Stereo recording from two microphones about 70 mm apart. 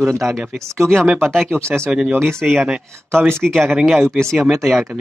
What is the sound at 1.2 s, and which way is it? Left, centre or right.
Speech, centre.